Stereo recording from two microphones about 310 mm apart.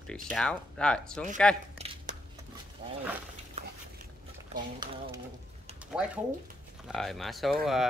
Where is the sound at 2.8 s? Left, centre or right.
Centre.